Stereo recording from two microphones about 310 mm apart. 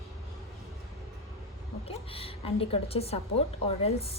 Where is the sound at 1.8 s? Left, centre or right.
Centre.